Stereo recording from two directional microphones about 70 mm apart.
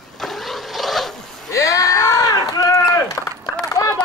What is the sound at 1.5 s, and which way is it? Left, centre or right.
Chop, left.